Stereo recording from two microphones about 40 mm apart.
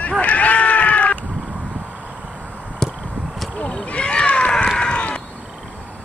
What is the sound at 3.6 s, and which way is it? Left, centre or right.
Horse, left.